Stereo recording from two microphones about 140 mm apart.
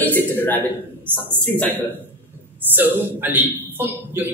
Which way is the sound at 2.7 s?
15° right (ahead or behind).